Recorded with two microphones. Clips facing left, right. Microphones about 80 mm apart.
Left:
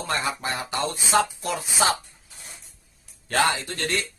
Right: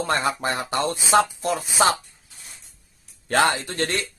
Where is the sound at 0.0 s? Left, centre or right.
Right.